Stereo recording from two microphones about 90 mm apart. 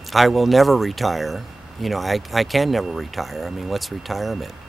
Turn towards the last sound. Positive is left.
turn(degrees=0)  # may be behind; listen again after turning